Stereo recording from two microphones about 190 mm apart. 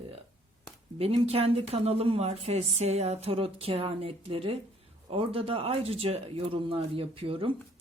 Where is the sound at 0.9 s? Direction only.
30° right (ahead or behind).